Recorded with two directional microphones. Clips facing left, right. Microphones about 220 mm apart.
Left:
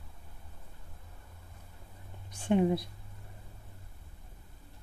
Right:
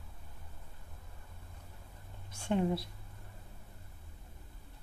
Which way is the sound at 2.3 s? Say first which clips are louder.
Left 5 dB; 15° left (ahead or behind).